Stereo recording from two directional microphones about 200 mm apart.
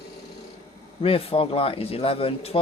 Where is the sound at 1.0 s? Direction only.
30° left (ahead or behind).